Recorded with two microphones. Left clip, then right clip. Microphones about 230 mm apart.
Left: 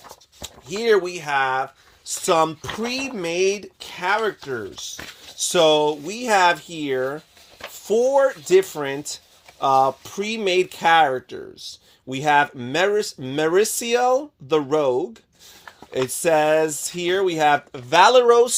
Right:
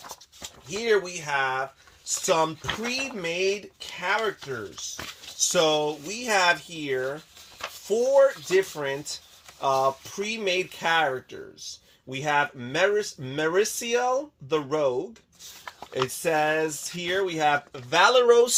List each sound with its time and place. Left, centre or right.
0.4 s speech: left